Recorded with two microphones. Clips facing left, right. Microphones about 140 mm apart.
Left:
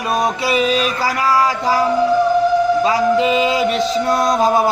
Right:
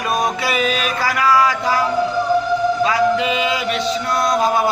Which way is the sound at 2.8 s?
30° left (ahead or behind).